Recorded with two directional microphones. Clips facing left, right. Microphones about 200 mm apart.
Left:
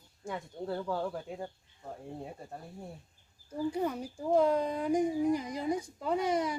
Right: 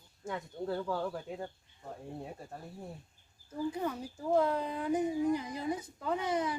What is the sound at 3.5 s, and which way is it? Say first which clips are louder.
Speech: left 3 dB; 10° left (ahead or behind).